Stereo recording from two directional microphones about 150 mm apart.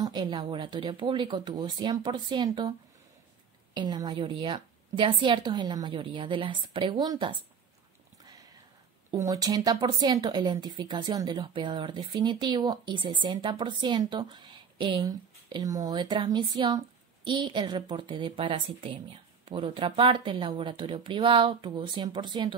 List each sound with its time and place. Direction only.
0.0 s a woman's voice: 30° right (ahead or behind)
3.7 s a woman's voice: 25° right (ahead or behind)
9.1 s speech: 25° right (ahead or behind)
9.8 s a woman's voice: 35° right (ahead or behind)